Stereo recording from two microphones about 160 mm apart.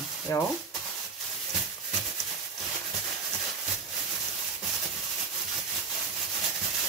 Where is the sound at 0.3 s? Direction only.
20° left (ahead or behind).